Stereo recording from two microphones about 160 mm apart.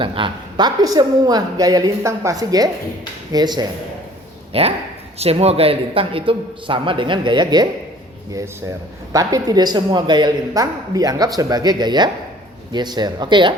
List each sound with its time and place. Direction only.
0.0 s speech: 30° right (ahead or behind)
4.5 s a man's voice: 40° right (ahead or behind)
9.1 s speech: 25° right (ahead or behind)